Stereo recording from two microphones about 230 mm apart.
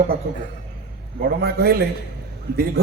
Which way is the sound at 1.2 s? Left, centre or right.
Right.